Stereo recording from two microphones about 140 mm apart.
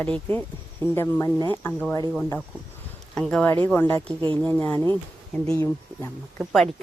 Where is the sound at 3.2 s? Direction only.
5° left (ahead or behind).